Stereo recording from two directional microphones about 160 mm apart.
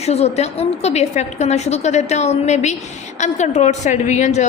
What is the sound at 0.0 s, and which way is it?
A woman's voice, 40° left (ahead or behind).